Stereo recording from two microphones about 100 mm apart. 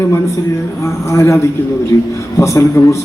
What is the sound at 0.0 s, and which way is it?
A man's voice, 25° left (ahead or behind).